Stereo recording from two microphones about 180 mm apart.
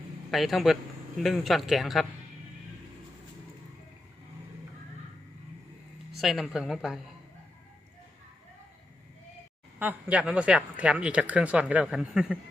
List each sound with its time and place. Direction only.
0.3 s speech: centre (ahead or behind)
6.1 s speech: centre (ahead or behind)
9.7 s speech: 10° right (ahead or behind)